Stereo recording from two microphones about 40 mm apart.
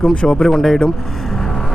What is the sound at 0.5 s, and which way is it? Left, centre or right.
Speech, centre.